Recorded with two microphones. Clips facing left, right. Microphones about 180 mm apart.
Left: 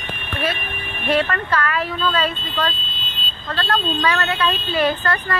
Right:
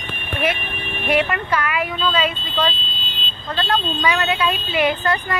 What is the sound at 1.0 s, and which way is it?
Speech, 15° right (ahead or behind).